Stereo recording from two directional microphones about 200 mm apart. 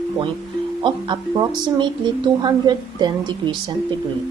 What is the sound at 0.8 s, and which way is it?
Speech, 25° right (ahead or behind).